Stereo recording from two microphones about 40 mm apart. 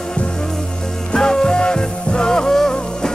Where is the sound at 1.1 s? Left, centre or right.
Centre.